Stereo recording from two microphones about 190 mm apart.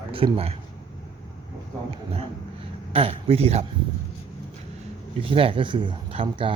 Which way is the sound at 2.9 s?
30° right (ahead or behind).